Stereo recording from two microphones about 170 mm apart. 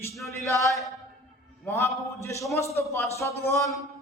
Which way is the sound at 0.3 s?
15° left (ahead or behind).